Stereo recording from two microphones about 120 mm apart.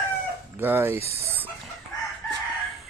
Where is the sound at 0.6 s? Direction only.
15° right (ahead or behind).